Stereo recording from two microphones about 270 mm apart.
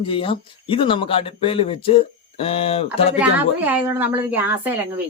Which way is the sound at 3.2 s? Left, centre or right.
Centre.